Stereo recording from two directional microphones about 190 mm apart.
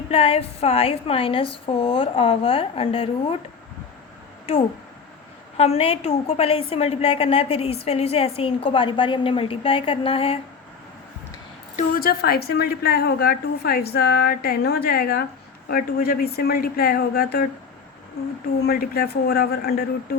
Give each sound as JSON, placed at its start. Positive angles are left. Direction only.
{"t": 0.1, "sound": "a woman's voice", "side_deg": 30}
{"t": 5.5, "sound": "a woman's voice", "side_deg": 30}
{"t": 11.8, "sound": "a woman's voice", "side_deg": 50}
{"t": 18.6, "sound": "speech", "side_deg": 55}